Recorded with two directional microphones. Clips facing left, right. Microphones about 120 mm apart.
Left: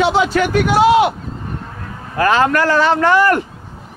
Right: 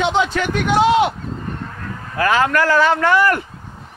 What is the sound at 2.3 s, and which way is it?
Speech, 30° left (ahead or behind).